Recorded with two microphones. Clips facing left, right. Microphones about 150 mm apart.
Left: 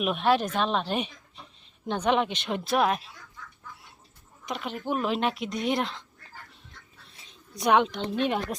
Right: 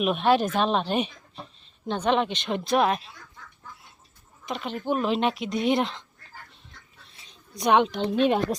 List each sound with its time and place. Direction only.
0.0 s speech: centre (ahead or behind)
1.9 s speech: 10° left (ahead or behind)
4.4 s speech: 10° left (ahead or behind)
7.3 s a sound: 5° left (ahead or behind)
8.1 s speech: 25° right (ahead or behind)